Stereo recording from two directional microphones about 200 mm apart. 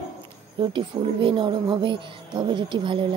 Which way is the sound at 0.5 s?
25° right (ahead or behind).